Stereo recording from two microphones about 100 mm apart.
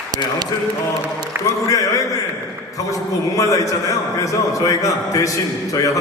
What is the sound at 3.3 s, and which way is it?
A man's voice, 35° left (ahead or behind).